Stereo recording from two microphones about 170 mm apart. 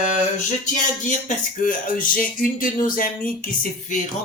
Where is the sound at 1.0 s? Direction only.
45° left (ahead or behind).